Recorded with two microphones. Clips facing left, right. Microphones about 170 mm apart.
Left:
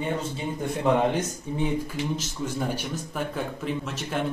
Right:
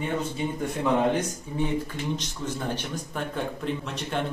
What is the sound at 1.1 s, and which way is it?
A man's voice, 15° left (ahead or behind).